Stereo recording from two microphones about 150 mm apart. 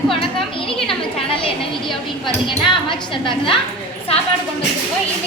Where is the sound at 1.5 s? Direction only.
30° left (ahead or behind).